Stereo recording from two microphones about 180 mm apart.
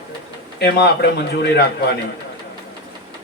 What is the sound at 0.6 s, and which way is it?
A man's voice, 65° left (ahead or behind).